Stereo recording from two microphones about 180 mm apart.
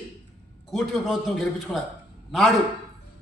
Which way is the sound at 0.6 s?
Centre (ahead or behind).